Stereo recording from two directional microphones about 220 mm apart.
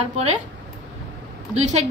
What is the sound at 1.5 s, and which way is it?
Speech, 30° right (ahead or behind).